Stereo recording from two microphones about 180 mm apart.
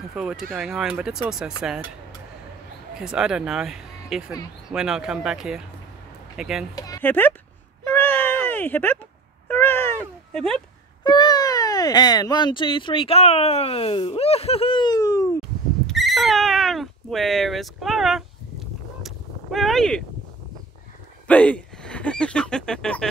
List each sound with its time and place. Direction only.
0.1 s speech: 5° right (ahead or behind)
2.9 s speech: 5° right (ahead or behind)
6.7 s speech: 15° left (ahead or behind)
7.8 s cat: 10° left (ahead or behind)
11.1 s speech: 25° left (ahead or behind)
15.9 s cat: centre (ahead or behind)
21.3 s speech: 5° left (ahead or behind)